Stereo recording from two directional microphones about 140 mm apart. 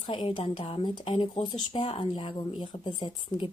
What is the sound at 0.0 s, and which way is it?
Speech, 35° left (ahead or behind).